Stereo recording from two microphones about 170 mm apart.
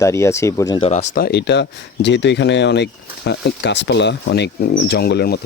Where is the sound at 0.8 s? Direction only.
40° left (ahead or behind).